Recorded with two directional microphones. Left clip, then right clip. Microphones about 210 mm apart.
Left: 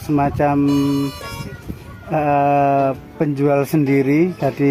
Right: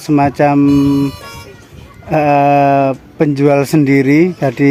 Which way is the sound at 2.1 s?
40° right (ahead or behind).